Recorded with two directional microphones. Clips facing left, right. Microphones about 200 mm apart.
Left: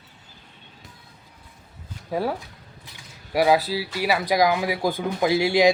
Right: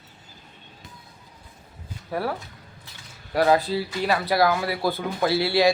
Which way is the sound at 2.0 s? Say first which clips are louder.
Left 2 dB; 15° left (ahead or behind).